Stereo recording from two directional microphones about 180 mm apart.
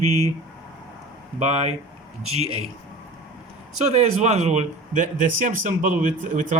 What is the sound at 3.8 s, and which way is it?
Speech, 40° right (ahead or behind).